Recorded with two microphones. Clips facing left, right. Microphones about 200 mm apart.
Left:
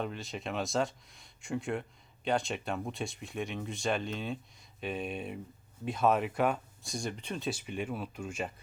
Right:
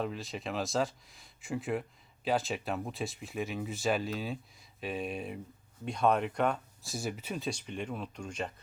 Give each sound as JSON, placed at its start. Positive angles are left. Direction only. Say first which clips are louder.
{"t": 0.0, "sound": "speech", "louder": "right 1 dB", "side_deg": 0}